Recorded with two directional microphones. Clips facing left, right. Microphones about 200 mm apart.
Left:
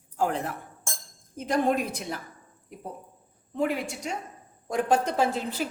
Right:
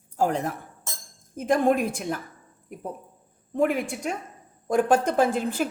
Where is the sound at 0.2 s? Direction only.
45° right (ahead or behind).